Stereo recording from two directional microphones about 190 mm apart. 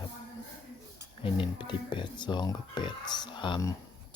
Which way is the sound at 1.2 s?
25° left (ahead or behind).